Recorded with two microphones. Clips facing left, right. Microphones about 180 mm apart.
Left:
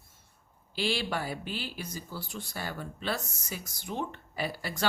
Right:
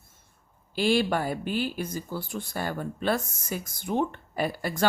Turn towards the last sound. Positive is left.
turn(degrees=-50)  # may be behind; listen again after turning